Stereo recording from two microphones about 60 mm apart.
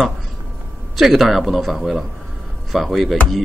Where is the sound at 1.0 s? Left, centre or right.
Centre.